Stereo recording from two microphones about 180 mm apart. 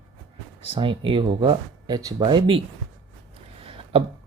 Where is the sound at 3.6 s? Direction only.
30° right (ahead or behind).